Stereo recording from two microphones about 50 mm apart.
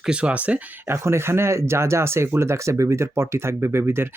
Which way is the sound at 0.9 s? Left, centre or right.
Right.